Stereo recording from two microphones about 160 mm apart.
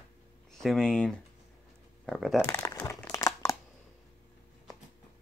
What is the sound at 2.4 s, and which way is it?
Speech, 20° left (ahead or behind).